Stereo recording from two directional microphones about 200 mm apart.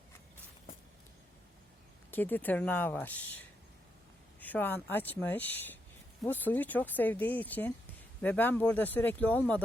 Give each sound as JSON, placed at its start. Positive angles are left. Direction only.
{"t": 2.0, "sound": "speech", "side_deg": 10}